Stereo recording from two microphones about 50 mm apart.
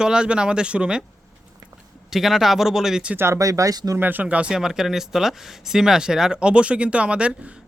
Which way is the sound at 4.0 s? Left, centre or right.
Right.